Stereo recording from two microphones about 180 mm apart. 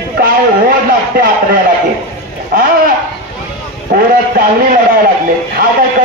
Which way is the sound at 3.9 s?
55° right (ahead or behind).